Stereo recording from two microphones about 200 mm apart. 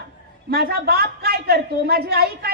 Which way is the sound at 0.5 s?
50° right (ahead or behind).